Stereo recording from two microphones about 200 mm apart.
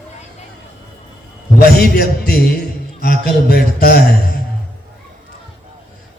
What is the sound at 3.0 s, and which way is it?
A man's voice, 50° left (ahead or behind).